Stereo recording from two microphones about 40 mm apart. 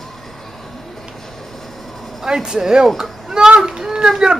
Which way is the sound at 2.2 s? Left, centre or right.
Centre.